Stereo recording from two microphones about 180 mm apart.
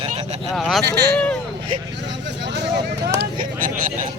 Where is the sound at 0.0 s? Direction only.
35° right (ahead or behind).